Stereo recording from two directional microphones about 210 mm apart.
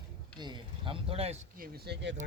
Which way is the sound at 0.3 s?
20° right (ahead or behind).